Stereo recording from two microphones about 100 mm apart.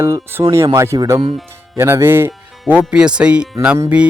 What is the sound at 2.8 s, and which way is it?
Speech, 10° right (ahead or behind).